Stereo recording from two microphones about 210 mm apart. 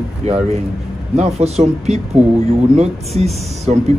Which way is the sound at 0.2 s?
30° right (ahead or behind).